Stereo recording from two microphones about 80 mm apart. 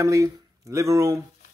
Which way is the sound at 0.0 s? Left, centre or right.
Right.